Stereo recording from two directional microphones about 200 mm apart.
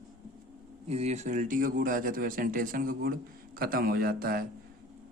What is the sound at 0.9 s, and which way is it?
Speech, 35° right (ahead or behind).